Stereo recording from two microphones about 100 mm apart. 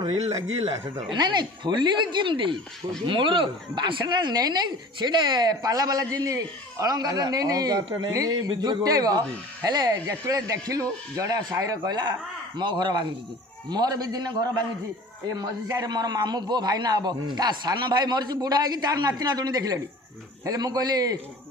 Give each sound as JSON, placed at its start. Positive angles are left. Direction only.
{"t": 0.7, "sound": "a man's voice", "side_deg": -40}
{"t": 15.7, "sound": "a man's voice", "side_deg": -45}